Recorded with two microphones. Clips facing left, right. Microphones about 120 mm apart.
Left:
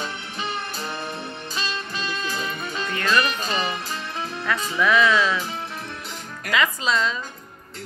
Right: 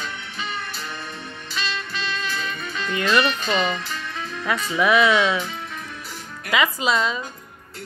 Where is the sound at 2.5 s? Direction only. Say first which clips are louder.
Even; 30° left (ahead or behind).